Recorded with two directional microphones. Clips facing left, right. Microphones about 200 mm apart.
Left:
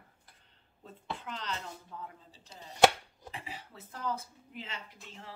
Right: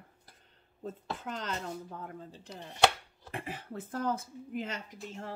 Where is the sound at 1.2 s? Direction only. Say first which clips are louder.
Right 6 dB; 45° right (ahead or behind).